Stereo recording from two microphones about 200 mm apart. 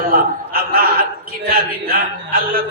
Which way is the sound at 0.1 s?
45° right (ahead or behind).